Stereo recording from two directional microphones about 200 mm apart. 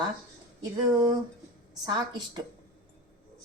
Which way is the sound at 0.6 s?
20° right (ahead or behind).